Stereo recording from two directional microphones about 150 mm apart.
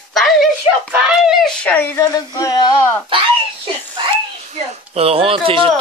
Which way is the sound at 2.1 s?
25° left (ahead or behind).